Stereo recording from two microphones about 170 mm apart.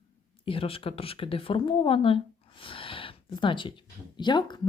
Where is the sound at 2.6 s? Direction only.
30° left (ahead or behind).